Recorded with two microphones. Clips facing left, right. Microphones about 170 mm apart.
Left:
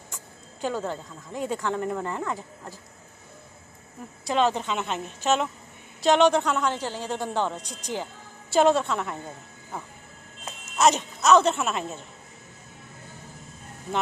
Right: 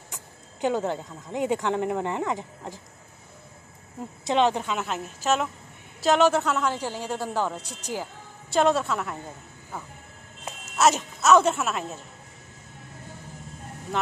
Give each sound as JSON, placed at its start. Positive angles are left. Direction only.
{"t": 0.1, "sound": "speech", "side_deg": -15}
{"t": 4.0, "sound": "speech", "side_deg": -20}
{"t": 10.8, "sound": "speech", "side_deg": -5}